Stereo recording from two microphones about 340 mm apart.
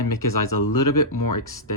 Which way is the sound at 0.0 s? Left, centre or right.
Left.